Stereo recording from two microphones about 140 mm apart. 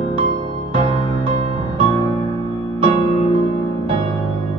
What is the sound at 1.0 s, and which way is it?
Music, 30° left (ahead or behind).